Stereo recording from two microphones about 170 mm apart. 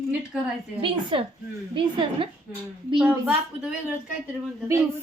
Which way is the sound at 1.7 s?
30° right (ahead or behind).